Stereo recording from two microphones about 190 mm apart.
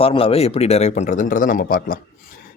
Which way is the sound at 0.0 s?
30° left (ahead or behind).